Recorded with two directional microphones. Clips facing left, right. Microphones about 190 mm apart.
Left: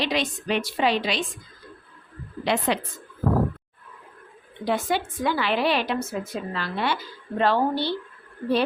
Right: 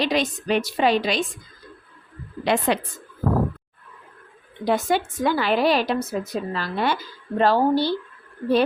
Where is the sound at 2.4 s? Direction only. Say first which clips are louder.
Right 3 dB; 50° right (ahead or behind).